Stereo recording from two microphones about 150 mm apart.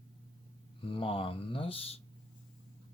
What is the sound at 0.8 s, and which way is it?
Speech, 35° left (ahead or behind).